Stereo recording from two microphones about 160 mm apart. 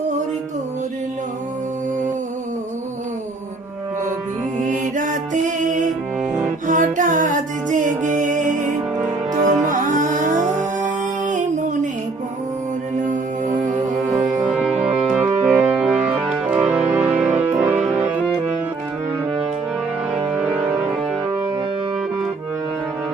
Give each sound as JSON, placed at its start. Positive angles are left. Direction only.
{"t": 4.6, "sound": "music", "side_deg": -55}
{"t": 14.5, "sound": "music", "side_deg": -10}
{"t": 20.3, "sound": "music", "side_deg": -5}